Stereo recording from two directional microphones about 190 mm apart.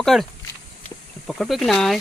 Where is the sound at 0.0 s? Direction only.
Centre (ahead or behind).